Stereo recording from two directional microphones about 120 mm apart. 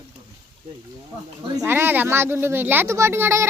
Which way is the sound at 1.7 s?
20° right (ahead or behind).